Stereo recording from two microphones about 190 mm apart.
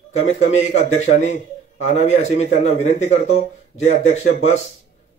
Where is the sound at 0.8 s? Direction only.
35° left (ahead or behind).